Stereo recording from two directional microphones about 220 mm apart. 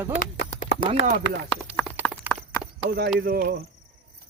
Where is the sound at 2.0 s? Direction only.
5° right (ahead or behind).